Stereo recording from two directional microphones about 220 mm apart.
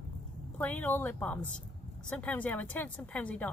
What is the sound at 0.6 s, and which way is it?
Speech, 10° left (ahead or behind).